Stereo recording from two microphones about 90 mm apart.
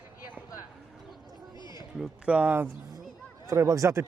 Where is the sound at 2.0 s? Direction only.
15° right (ahead or behind).